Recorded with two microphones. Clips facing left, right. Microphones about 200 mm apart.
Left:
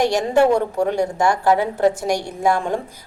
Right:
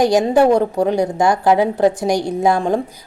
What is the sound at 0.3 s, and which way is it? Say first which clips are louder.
A woman's voice: even; 35° right (ahead or behind).